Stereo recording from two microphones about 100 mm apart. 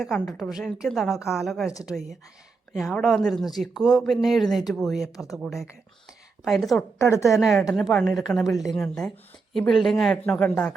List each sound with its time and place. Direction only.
0.0 s speech: 5° left (ahead or behind)
2.9 s speech: 5° left (ahead or behind)
6.1 s a sound: centre (ahead or behind)
7.0 s a woman's voice: 30° left (ahead or behind)
7.3 s speech: centre (ahead or behind)
10.2 s speech: 15° left (ahead or behind)